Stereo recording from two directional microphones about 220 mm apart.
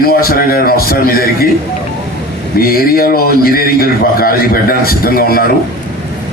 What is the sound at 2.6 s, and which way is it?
A man's voice, 40° left (ahead or behind).